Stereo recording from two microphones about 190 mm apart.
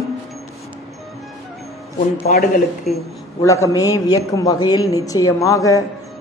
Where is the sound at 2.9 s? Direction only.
35° left (ahead or behind).